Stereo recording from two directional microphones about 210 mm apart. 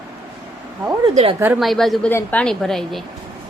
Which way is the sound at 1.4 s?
5° right (ahead or behind).